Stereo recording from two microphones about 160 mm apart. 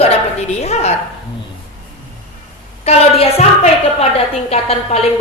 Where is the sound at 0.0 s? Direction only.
40° left (ahead or behind).